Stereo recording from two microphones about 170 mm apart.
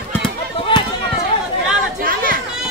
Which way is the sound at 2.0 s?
55° right (ahead or behind).